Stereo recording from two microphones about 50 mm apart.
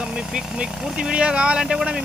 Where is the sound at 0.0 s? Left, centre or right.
Centre.